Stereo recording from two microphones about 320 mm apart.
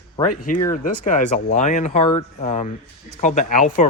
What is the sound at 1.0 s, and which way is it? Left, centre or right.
Speech, left.